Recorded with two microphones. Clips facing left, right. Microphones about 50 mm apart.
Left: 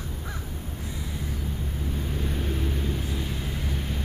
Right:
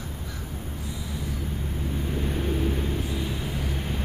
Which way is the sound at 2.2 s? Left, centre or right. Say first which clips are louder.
Right 5 dB; centre.